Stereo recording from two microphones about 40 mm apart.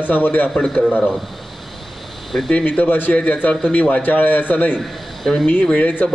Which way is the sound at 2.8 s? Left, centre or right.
Left.